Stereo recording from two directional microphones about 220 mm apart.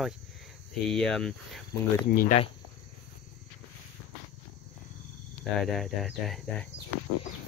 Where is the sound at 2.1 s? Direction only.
40° left (ahead or behind).